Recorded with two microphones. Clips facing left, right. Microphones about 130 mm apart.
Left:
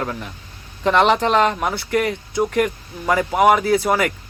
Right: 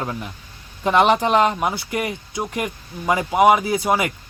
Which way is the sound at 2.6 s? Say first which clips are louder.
Left 1 dB; 15° right (ahead or behind).